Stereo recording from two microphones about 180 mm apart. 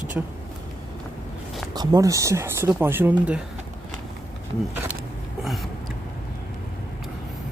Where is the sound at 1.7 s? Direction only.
20° right (ahead or behind).